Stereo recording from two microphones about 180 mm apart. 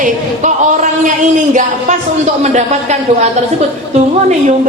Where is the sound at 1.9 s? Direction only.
40° right (ahead or behind).